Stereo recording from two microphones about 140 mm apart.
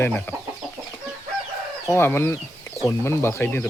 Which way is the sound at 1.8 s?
15° left (ahead or behind).